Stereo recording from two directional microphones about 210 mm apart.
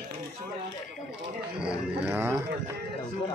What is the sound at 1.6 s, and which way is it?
Speech, 5° right (ahead or behind).